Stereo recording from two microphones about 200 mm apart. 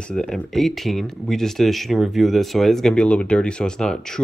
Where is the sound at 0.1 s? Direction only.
5° left (ahead or behind).